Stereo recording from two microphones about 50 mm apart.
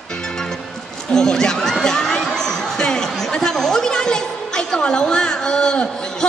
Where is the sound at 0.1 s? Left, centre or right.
Centre.